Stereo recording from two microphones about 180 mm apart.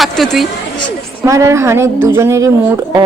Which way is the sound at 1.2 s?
15° right (ahead or behind).